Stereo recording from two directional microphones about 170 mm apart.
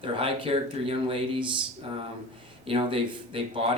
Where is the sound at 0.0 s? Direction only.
30° right (ahead or behind).